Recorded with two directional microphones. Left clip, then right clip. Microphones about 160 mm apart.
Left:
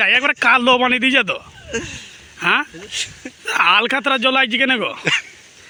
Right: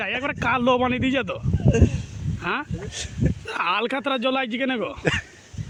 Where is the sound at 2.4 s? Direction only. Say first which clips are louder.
Left 10 dB; 10° left (ahead or behind).